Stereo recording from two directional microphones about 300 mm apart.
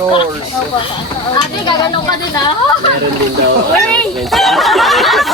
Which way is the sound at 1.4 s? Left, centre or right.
Centre.